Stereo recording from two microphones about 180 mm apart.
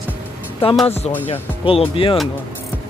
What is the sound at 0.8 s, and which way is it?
Speech, 35° left (ahead or behind).